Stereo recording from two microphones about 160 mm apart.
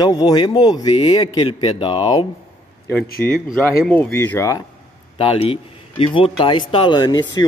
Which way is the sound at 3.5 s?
10° left (ahead or behind).